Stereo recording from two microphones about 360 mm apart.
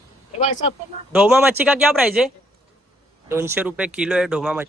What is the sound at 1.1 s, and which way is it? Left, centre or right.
Speech, centre.